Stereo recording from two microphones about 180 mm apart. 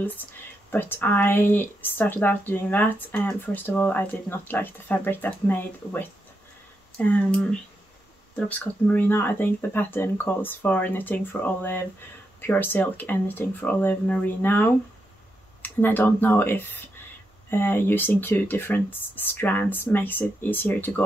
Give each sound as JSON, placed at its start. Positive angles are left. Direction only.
{"t": 0.0, "sound": "speech", "side_deg": 10}